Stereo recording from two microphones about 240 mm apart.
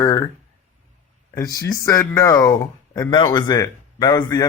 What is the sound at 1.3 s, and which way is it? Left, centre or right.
Speech, centre.